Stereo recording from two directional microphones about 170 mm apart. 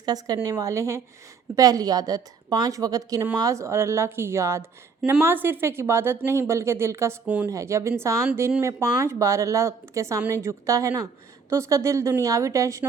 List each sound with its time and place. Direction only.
0.0 s a woman's voice: 20° right (ahead or behind)